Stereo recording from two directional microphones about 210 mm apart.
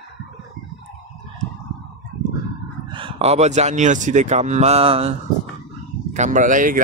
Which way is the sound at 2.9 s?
25° right (ahead or behind).